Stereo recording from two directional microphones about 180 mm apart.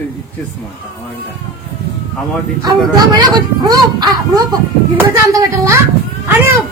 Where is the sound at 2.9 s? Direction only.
20° right (ahead or behind).